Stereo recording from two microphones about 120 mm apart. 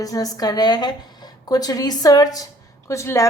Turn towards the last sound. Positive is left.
turn(degrees=25)  # may be behind; listen again after turning